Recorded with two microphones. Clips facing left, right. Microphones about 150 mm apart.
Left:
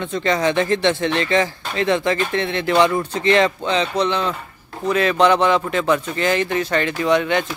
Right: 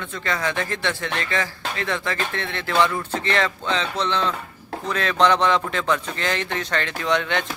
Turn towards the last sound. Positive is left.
turn(degrees=5)  # may be behind; listen again after turning